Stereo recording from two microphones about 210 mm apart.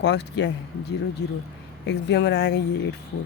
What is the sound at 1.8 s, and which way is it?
Speech, 55° left (ahead or behind).